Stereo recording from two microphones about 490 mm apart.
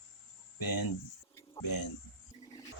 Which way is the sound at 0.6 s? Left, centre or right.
Left.